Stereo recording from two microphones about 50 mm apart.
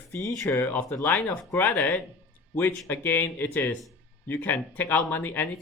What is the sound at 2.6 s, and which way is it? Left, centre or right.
Speech, left.